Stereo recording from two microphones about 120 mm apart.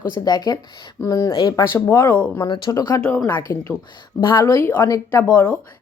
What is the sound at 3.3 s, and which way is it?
Speech, 15° left (ahead or behind).